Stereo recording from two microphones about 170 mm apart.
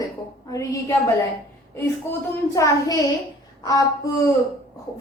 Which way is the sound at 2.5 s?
20° left (ahead or behind).